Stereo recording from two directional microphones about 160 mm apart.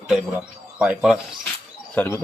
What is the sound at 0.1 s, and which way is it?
Speech, 10° right (ahead or behind).